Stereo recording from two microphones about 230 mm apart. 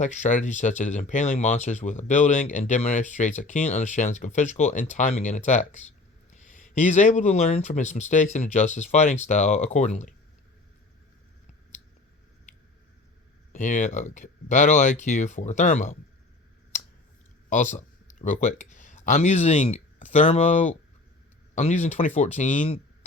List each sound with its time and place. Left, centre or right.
0.0 s speech: left
13.5 s speech: left
17.5 s speech: left